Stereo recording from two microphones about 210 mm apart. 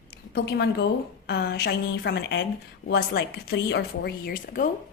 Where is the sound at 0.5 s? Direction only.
50° left (ahead or behind).